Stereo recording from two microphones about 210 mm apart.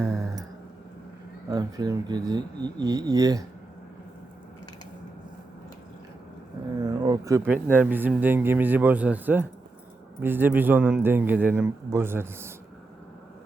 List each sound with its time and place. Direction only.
0.0 s a sound: 15° right (ahead or behind)
1.5 s speech: 20° right (ahead or behind)
6.7 s speech: 20° right (ahead or behind)